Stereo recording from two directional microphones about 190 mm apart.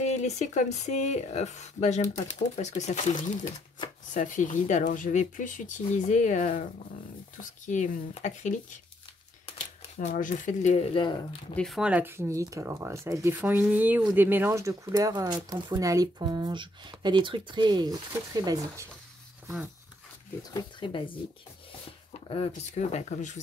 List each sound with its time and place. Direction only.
0.0 s speech: 35° left (ahead or behind)
9.9 s speech: 45° left (ahead or behind)
11.5 s speech: centre (ahead or behind); by 18.9 s 20° right (ahead or behind)
20.5 s speech: 25° left (ahead or behind)
22.3 s speech: 35° left (ahead or behind)